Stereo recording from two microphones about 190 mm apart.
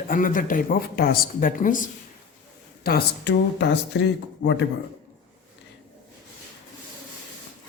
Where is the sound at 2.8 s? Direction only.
60° left (ahead or behind).